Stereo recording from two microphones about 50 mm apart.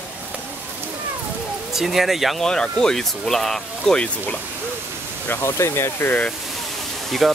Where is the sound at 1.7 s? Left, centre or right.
Centre.